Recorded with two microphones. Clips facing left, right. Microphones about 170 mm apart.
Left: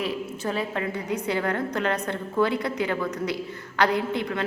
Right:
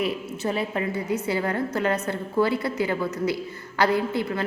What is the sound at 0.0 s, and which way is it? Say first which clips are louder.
A woman's voice: right 2 dB; 10° right (ahead or behind).